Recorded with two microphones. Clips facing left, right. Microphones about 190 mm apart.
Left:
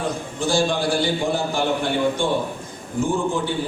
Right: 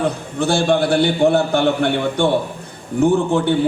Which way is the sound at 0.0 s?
60° right (ahead or behind).